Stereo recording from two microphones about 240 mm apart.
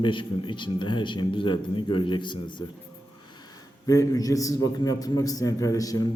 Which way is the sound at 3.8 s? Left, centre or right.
Centre.